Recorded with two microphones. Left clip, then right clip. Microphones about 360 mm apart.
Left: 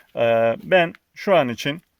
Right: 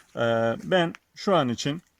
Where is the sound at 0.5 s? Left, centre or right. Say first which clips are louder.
Left 6 dB; centre.